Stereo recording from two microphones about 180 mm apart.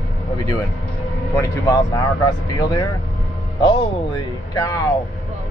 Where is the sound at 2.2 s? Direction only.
20° left (ahead or behind).